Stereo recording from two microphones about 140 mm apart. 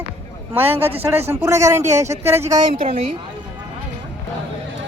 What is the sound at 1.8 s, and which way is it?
Speech, 55° right (ahead or behind).